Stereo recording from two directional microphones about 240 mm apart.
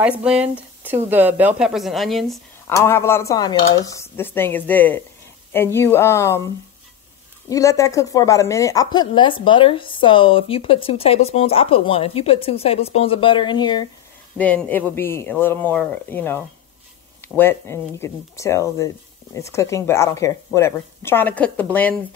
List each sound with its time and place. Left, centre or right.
0.0 s speech: centre
2.7 s speech: centre
7.4 s speech: centre
14.3 s speech: centre